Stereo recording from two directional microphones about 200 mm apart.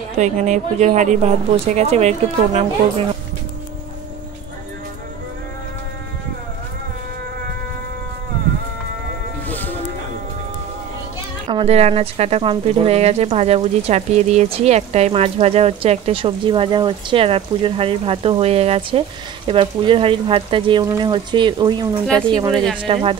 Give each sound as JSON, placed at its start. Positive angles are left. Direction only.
{"t": 0.2, "sound": "speech", "side_deg": -35}
{"t": 9.5, "sound": "music", "side_deg": 10}
{"t": 11.4, "sound": "speech", "side_deg": -30}
{"t": 22.0, "sound": "speech", "side_deg": 5}
{"t": 22.3, "sound": "speech", "side_deg": -20}